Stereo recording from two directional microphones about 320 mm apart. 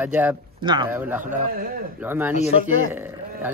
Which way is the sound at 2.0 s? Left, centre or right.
Centre.